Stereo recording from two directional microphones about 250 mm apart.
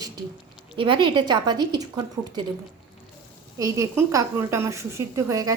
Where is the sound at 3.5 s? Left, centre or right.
Centre.